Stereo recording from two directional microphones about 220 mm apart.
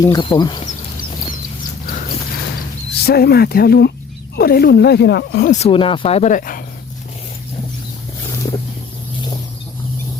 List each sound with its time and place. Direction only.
0.0 s speech: 20° left (ahead or behind)
1.9 s horse: 40° left (ahead or behind)
3.0 s speech: 45° left (ahead or behind)
5.5 s speech: 30° left (ahead or behind)